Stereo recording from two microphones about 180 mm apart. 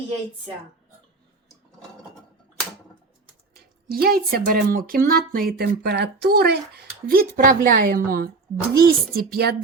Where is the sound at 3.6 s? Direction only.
55° right (ahead or behind).